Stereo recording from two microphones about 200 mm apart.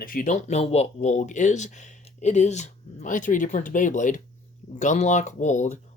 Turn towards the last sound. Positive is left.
turn(degrees=35)  # may be behind; listen again after turning